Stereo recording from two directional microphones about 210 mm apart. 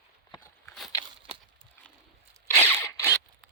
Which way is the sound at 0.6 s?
Centre (ahead or behind).